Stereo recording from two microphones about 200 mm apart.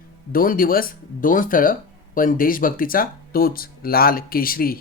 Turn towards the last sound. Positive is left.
turn(degrees=45)  # may be behind; listen again after turning